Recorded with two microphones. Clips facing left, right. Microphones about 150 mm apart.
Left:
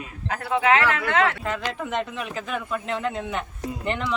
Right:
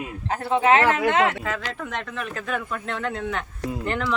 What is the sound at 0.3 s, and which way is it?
Speech, 30° right (ahead or behind).